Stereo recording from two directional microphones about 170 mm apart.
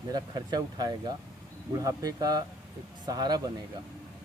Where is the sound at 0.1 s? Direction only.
25° right (ahead or behind).